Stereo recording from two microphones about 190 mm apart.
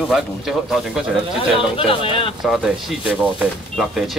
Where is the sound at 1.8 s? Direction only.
30° left (ahead or behind).